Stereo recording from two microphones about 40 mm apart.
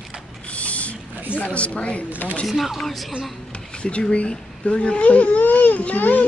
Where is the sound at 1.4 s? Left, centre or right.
Left.